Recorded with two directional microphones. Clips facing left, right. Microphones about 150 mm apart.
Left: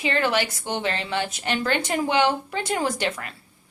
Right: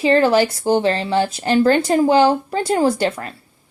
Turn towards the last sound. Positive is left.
turn(degrees=-35)  # may be behind; listen again after turning